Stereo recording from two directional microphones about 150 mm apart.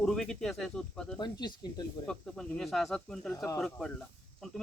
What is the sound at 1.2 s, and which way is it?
Speech, 30° left (ahead or behind).